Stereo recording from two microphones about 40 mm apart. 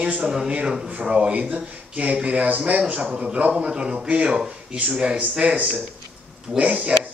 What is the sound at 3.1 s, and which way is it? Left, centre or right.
Speech, right.